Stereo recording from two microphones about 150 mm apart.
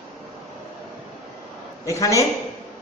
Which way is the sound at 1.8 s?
20° left (ahead or behind).